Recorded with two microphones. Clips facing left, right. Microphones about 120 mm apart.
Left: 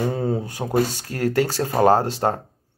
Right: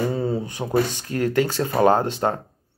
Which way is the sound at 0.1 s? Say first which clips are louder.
Even; 55° left (ahead or behind).